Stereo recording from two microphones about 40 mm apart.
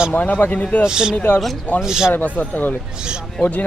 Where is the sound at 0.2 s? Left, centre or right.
Left.